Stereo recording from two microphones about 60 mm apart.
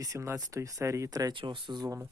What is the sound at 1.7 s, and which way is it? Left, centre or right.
Speech, right.